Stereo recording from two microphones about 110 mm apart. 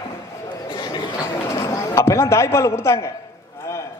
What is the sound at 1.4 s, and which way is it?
A man's voice, 25° left (ahead or behind).